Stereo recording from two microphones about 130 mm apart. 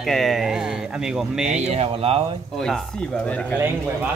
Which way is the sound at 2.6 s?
5° left (ahead or behind).